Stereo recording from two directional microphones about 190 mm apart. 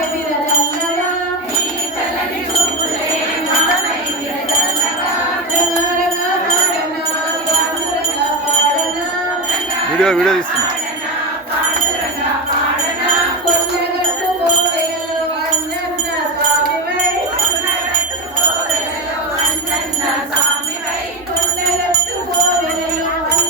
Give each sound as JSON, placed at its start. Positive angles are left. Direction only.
{"t": 10.0, "sound": "wind chime", "side_deg": 5}